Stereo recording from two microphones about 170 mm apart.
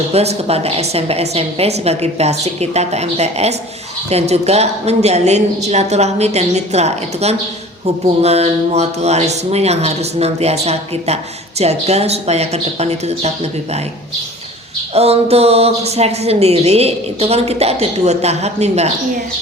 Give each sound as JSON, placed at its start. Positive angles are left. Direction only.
{"t": 0.1, "sound": "speech", "side_deg": -40}
{"t": 14.9, "sound": "speech", "side_deg": -35}